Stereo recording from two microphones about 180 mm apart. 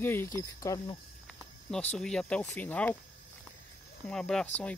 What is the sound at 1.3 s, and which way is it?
Cricket, 5° left (ahead or behind).